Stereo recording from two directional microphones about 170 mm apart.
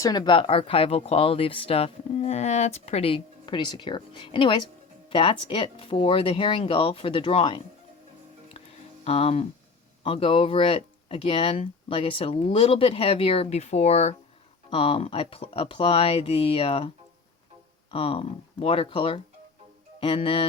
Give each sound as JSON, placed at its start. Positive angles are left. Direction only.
{"t": 0.0, "sound": "speech", "side_deg": 25}
{"t": 9.0, "sound": "speech", "side_deg": 35}
{"t": 17.9, "sound": "speech", "side_deg": 30}